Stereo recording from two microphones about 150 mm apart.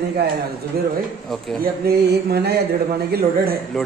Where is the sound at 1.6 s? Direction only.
90° right.